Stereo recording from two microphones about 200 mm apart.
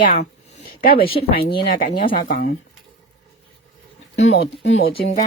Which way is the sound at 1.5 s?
50° left (ahead or behind).